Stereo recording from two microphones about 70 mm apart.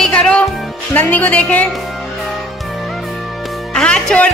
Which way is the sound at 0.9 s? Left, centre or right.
Left.